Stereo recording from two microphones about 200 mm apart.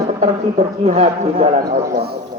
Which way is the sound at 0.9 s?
30° right (ahead or behind).